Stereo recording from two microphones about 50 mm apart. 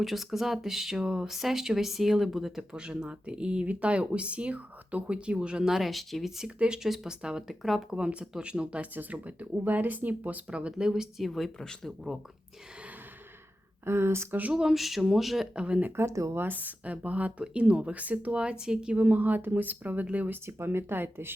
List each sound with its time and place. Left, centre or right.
0.0 s speech: centre
2.7 s speech: centre
5.6 s speech: centre
7.1 s speech: centre; by 10.4 s right
10.5 s speech: centre
11.2 s speech: centre
13.8 s speech: right
14.3 s speech: right
14.5 s speech: centre
15.5 s speech: centre
16.0 s speech: right
16.6 s speech: right
18.9 s speech: right